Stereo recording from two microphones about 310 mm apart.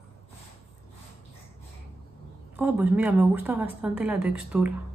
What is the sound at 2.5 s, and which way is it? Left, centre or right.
Speech, centre.